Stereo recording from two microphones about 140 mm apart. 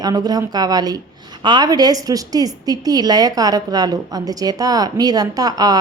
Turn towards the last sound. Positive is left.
turn(degrees=-25)  # may be behind; listen again after turning